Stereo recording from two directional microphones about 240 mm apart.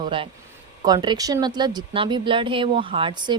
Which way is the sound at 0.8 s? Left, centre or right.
Centre.